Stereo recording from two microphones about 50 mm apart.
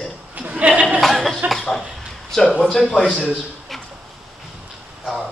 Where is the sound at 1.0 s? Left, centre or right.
Centre.